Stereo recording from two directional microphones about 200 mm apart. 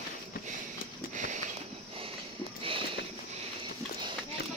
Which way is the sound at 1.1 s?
40° right (ahead or behind).